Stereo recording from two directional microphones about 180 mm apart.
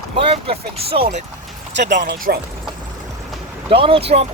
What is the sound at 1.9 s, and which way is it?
Speech, 55° right (ahead or behind).